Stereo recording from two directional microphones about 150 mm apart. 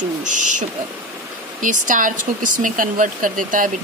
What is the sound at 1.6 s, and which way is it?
Speech, 60° right (ahead or behind).